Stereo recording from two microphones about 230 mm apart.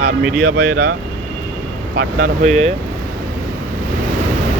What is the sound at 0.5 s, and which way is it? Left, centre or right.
Speech, right.